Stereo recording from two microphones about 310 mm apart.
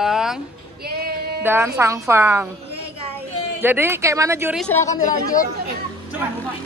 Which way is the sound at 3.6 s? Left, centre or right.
Centre.